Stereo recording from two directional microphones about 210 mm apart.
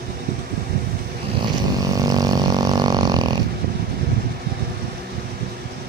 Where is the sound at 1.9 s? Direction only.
15° right (ahead or behind).